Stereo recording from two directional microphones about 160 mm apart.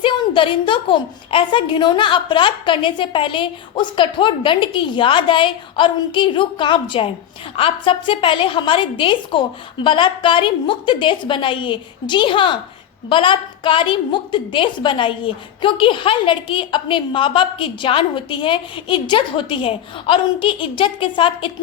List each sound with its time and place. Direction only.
0.0 s a woman's voice: 30° left (ahead or behind)